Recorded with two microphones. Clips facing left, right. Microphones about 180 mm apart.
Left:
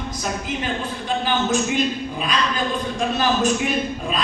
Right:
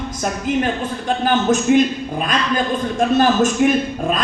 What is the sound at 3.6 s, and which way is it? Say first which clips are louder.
Speech: right 9 dB; 50° right (ahead or behind).